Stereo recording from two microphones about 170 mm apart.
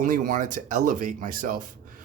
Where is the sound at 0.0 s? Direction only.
50° right (ahead or behind).